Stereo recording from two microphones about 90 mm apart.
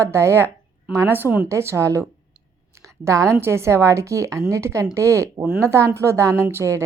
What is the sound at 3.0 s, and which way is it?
A woman's voice, 35° right (ahead or behind).